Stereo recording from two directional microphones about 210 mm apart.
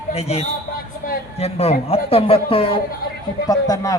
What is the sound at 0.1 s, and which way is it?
A man's voice, 30° left (ahead or behind).